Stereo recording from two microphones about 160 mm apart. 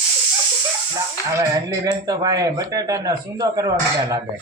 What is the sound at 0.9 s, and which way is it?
Speech, 20° right (ahead or behind).